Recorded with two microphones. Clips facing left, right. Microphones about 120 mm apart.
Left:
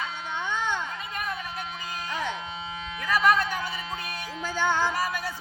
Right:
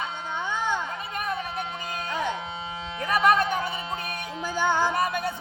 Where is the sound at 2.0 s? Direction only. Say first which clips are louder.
Right 3 dB; 20° right (ahead or behind).